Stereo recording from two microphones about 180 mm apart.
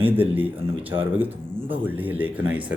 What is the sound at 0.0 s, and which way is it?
A man's voice, 10° right (ahead or behind).